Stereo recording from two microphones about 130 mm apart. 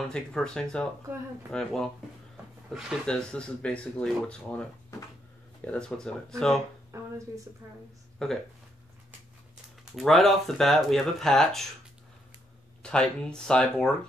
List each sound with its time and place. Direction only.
0.1 s speech: 5° left (ahead or behind)
6.9 s a sound: 25° right (ahead or behind)
8.2 s speech: 5° left (ahead or behind)
9.9 s speech: centre (ahead or behind)
12.8 s speech: 5° left (ahead or behind)